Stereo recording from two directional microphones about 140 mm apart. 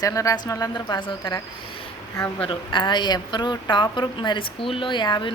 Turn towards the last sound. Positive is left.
turn(degrees=30)  # may be behind; listen again after turning